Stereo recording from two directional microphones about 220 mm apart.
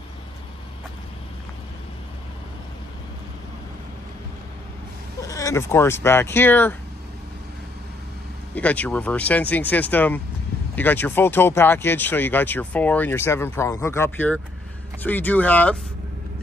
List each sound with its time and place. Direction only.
5.2 s speech: 15° left (ahead or behind)
8.5 s speech: 5° left (ahead or behind)